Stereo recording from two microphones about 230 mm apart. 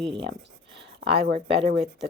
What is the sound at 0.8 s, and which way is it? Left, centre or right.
Speech, right.